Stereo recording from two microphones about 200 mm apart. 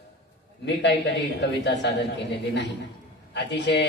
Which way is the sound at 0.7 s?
60° left (ahead or behind).